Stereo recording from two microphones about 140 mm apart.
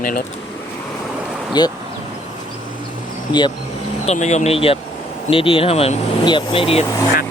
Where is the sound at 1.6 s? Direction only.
30° left (ahead or behind).